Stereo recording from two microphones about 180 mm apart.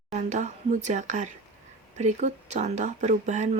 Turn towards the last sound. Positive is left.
turn(degrees=-40)  # may be behind; listen again after turning